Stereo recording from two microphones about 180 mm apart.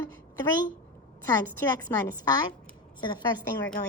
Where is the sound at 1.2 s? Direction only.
15° left (ahead or behind).